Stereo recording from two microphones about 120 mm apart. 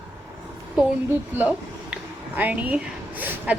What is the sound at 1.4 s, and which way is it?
Speech, 15° right (ahead or behind).